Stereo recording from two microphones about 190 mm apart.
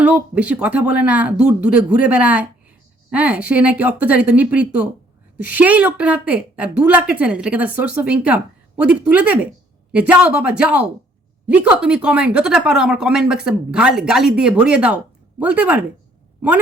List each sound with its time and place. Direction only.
0.0 s a woman's voice: 5° right (ahead or behind)